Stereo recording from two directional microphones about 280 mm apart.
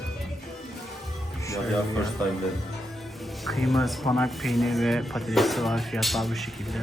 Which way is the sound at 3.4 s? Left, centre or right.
Centre.